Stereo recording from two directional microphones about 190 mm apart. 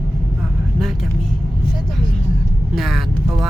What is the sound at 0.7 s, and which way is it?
Speech, centre (ahead or behind).